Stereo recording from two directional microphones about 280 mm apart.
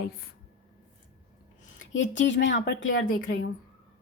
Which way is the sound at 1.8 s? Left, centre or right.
Left.